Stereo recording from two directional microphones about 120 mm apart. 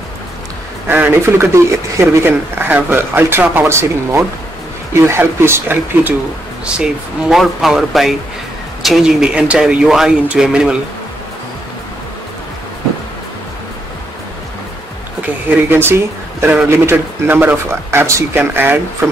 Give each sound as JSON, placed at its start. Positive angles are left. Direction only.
{"t": 0.8, "sound": "speech", "side_deg": -15}
{"t": 6.6, "sound": "speech", "side_deg": -10}
{"t": 15.2, "sound": "speech", "side_deg": -15}